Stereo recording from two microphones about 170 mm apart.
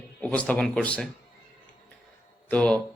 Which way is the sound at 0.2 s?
5° left (ahead or behind).